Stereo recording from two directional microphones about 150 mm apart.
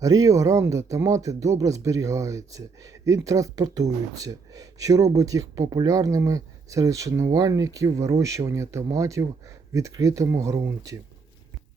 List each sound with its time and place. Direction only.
0.0 s speech: 25° right (ahead or behind)